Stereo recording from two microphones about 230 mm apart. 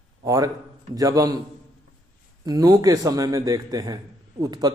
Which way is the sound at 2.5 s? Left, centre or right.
Centre.